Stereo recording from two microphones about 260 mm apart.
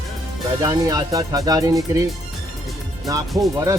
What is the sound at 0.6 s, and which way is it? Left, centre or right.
Speech, centre.